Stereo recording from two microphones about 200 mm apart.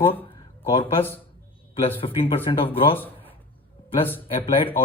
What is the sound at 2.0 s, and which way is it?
Speech, 25° left (ahead or behind).